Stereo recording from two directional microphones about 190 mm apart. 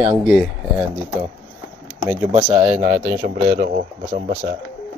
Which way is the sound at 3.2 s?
50° right (ahead or behind).